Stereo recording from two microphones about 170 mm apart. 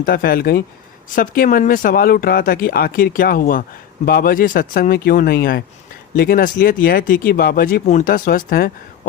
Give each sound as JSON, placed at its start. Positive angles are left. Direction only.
{"t": 0.0, "sound": "speech", "side_deg": 60}